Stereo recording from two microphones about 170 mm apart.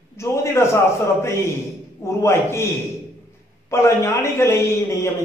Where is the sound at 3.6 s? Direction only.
15° left (ahead or behind).